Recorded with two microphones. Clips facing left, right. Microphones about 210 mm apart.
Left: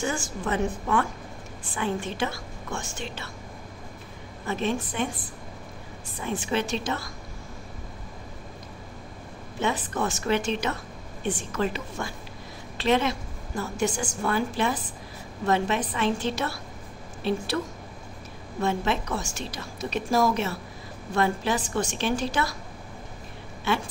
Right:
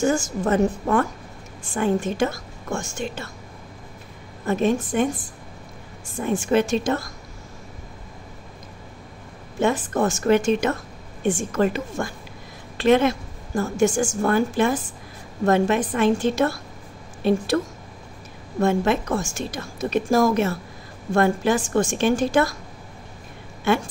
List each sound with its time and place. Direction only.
0.0 s a woman's voice: 45° right (ahead or behind)
4.5 s a woman's voice: 45° right (ahead or behind)
9.6 s a woman's voice: 45° right (ahead or behind)
18.6 s a woman's voice: 50° right (ahead or behind)